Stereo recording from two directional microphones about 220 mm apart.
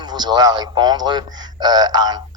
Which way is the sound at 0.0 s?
20° right (ahead or behind).